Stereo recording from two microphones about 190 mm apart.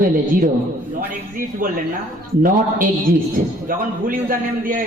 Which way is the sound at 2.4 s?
50° right (ahead or behind).